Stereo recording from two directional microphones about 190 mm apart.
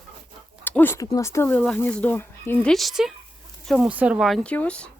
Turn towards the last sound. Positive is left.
turn(degrees=5)  # may be behind; listen again after turning